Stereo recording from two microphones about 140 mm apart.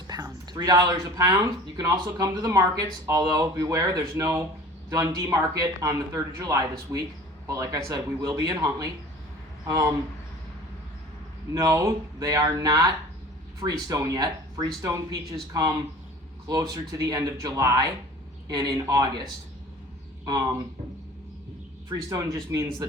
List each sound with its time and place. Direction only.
0.1 s speech: 25° right (ahead or behind)
11.5 s speech: 20° right (ahead or behind)
21.8 s speech: 25° right (ahead or behind)